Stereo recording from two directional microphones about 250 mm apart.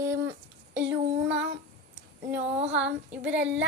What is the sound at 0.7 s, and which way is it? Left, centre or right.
Child singing, right.